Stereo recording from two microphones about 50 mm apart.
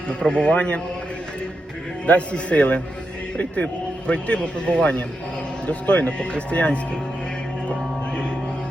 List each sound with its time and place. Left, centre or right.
0.1 s a man's voice: centre
2.0 s a man's voice: left